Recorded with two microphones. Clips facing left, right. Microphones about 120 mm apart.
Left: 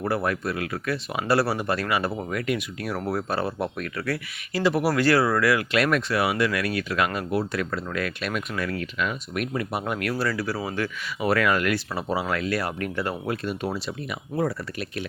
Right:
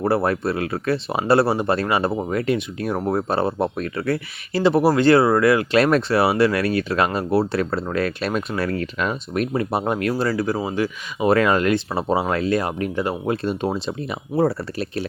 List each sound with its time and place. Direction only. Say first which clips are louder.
0.0 s speech: right 6 dB; 30° right (ahead or behind)